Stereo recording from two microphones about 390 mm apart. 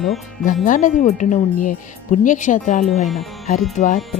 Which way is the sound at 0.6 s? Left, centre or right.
Centre.